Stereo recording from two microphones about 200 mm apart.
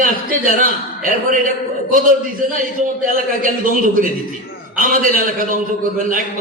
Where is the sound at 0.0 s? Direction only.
45° right (ahead or behind).